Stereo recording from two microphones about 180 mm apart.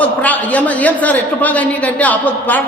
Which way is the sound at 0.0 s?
10° left (ahead or behind).